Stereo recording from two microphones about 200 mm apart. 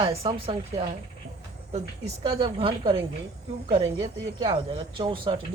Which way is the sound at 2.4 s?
25° right (ahead or behind).